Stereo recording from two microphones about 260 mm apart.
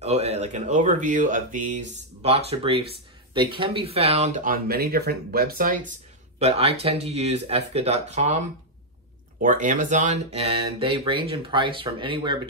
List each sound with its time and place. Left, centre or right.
0.0 s speech: right